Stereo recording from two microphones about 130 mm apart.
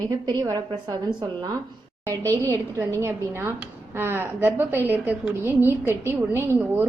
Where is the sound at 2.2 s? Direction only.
15° left (ahead or behind).